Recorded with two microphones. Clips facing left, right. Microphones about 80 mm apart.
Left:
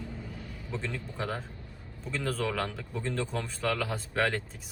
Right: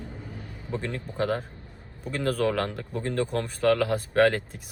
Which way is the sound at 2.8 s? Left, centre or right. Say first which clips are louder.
Right 5 dB; right.